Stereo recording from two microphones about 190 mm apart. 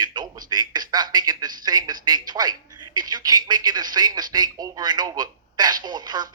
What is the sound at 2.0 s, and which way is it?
A woman's voice, 20° right (ahead or behind).